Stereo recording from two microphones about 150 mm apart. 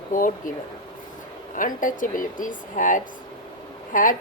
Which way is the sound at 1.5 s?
60° left (ahead or behind).